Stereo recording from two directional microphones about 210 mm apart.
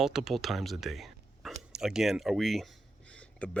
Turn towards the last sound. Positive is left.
turn(degrees=5)  # may be behind; listen again after turning